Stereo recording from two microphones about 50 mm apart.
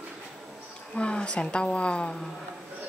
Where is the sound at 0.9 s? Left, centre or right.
Left.